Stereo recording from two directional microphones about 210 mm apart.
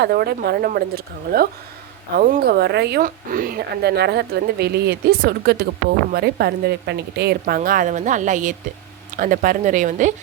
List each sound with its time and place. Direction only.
0.0 s a woman's voice: 50° right (ahead or behind)